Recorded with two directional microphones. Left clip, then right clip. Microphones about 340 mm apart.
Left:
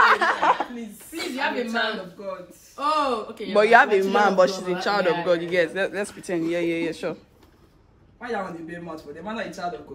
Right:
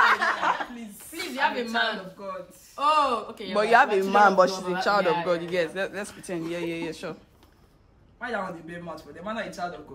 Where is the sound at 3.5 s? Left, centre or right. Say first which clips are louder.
Left 4 dB; centre.